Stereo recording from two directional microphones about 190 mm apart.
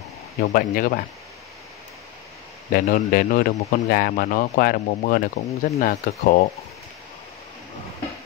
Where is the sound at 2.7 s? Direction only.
50° left (ahead or behind).